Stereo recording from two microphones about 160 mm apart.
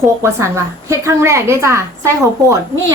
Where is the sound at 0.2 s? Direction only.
15° right (ahead or behind).